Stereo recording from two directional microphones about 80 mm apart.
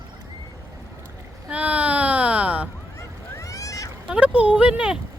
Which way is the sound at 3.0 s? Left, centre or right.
Left.